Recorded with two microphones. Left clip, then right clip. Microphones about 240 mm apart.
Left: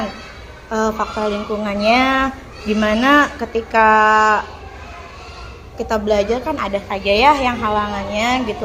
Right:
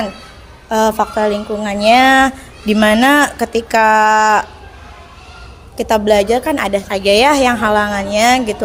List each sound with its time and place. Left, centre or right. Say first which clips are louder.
0.7 s a woman's voice: right 6 dB; right
5.7 s a woman's voice: right 5 dB; right